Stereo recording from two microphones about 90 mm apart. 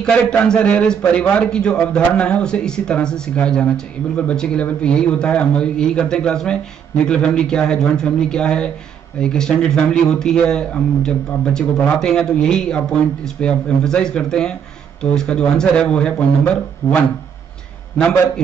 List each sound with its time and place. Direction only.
0.0 s a man's voice: 10° left (ahead or behind)
16.8 s speech: 30° left (ahead or behind)